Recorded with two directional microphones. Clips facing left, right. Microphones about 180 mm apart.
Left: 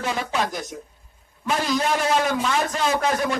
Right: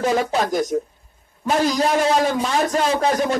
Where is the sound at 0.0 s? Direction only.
40° right (ahead or behind).